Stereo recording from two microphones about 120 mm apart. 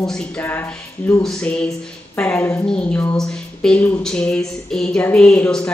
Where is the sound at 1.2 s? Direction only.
5° left (ahead or behind).